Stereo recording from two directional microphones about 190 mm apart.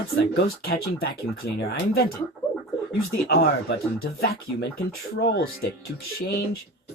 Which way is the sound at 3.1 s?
55° left (ahead or behind).